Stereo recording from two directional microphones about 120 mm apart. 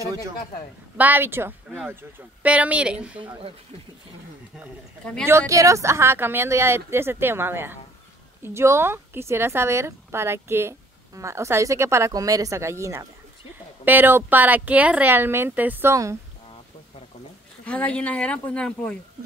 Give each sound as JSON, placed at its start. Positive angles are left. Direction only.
{"t": 0.9, "sound": "speech", "side_deg": -15}
{"t": 5.5, "sound": "a woman's voice", "side_deg": -25}
{"t": 17.6, "sound": "speech", "side_deg": 10}